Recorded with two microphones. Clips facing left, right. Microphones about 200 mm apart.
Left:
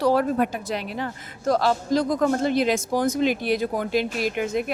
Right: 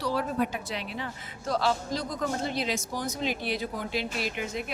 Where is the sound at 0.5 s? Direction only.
45° left (ahead or behind).